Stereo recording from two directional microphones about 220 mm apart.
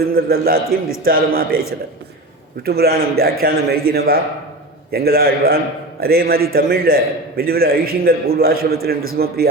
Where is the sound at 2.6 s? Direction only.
45° right (ahead or behind).